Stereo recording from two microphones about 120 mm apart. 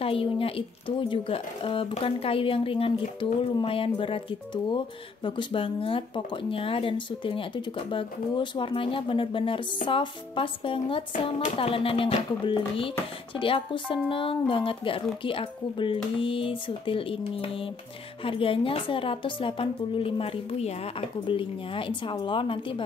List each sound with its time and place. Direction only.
0.0 s speech: 50° left (ahead or behind)